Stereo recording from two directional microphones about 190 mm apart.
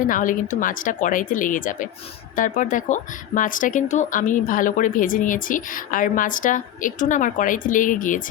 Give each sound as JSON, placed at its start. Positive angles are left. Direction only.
{"t": 0.1, "sound": "speech", "side_deg": 45}